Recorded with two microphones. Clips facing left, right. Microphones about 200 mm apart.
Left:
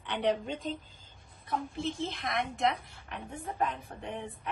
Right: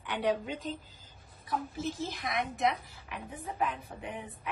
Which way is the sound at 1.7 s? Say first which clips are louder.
Left 1 dB; 5° right (ahead or behind).